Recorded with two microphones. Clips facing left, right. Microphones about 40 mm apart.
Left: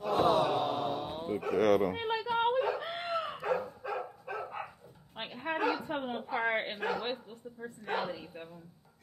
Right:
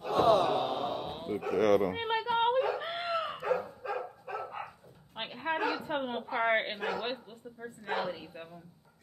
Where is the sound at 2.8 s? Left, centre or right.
Right.